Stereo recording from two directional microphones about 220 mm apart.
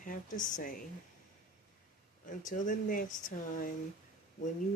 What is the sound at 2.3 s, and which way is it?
Speech, 35° left (ahead or behind).